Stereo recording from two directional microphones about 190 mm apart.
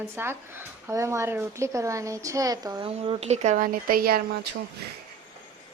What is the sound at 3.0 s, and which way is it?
Speech, 30° right (ahead or behind).